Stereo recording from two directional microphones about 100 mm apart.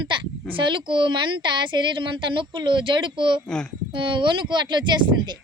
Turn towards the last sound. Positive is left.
turn(degrees=-50)  # may be behind; listen again after turning